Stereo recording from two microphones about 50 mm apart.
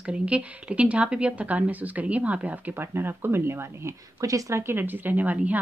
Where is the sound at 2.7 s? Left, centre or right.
Right.